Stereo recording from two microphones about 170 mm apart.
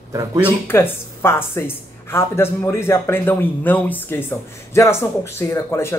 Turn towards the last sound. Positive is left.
turn(degrees=15)  # may be behind; listen again after turning